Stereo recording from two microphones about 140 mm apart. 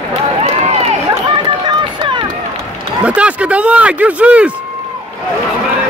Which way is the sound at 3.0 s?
10° right (ahead or behind).